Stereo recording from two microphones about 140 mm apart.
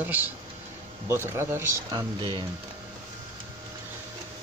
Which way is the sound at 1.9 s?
30° right (ahead or behind).